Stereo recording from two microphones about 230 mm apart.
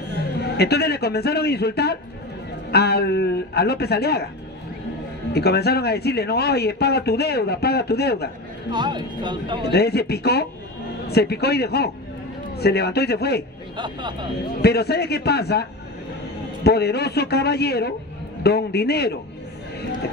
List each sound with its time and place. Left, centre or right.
0.6 s speech: left
5.3 s speech: left
8.7 s speech: centre
9.7 s speech: left
13.7 s speech: centre
14.6 s speech: left
16.6 s speech: left